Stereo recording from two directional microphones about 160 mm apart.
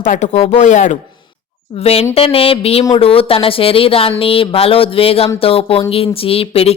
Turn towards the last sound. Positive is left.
turn(degrees=40)  # may be behind; listen again after turning